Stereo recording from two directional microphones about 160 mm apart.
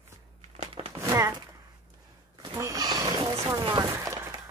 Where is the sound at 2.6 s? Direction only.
20° right (ahead or behind).